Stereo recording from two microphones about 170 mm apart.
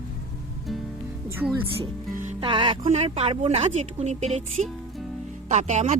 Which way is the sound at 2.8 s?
40° right (ahead or behind).